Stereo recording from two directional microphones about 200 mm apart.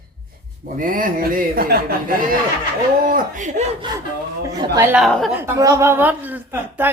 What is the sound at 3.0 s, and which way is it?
Speech, 40° right (ahead or behind).